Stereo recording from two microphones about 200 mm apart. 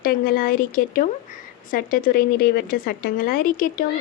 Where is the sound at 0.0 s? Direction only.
45° left (ahead or behind).